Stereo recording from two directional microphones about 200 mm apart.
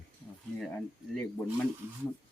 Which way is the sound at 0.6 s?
Centre (ahead or behind).